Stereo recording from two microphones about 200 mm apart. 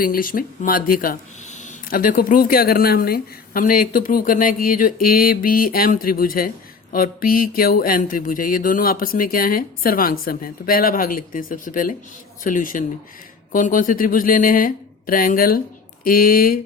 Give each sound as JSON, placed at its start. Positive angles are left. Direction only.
{"t": 0.0, "sound": "speech", "side_deg": 45}